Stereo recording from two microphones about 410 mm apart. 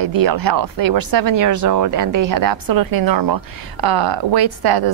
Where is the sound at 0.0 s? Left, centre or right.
Right.